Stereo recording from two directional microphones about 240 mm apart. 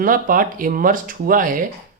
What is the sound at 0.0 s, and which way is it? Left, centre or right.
Speech, right.